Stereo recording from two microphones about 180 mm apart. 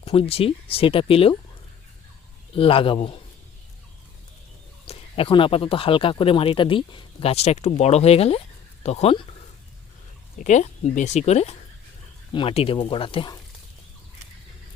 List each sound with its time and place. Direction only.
0.0 s speech: 30° left (ahead or behind)
2.6 s speech: 30° left (ahead or behind)
4.9 s speech: 30° left (ahead or behind)
10.3 s speech: 40° left (ahead or behind); by 13.4 s 25° left (ahead or behind)